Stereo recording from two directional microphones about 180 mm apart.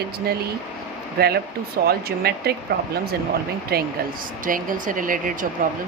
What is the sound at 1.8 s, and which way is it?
Speech, 60° right (ahead or behind).